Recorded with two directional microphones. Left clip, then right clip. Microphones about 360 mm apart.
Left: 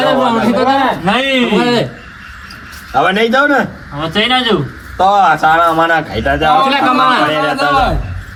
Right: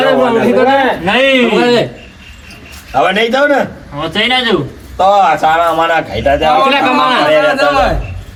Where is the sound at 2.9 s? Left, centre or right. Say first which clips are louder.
Even; left.